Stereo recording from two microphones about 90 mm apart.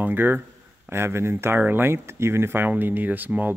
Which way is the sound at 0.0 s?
25° right (ahead or behind).